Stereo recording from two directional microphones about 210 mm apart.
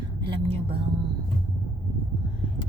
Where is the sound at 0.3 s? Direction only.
25° right (ahead or behind).